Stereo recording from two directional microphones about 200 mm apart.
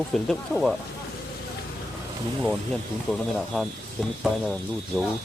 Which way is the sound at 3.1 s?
Centre (ahead or behind).